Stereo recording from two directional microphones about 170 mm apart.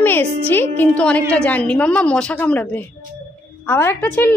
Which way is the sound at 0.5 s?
10° left (ahead or behind).